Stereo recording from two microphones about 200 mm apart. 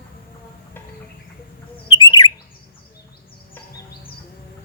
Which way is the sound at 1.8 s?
20° left (ahead or behind).